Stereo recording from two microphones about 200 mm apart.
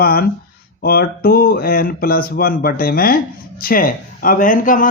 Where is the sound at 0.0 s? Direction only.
50° left (ahead or behind).